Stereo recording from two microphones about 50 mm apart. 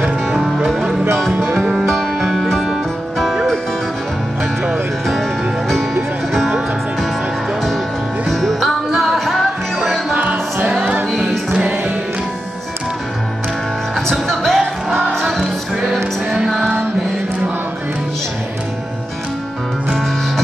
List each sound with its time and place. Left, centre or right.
1.3 s music: right
1.8 s music: centre
8.3 s music: centre
10.1 s music: right
11.1 s music: centre
14.2 s music: centre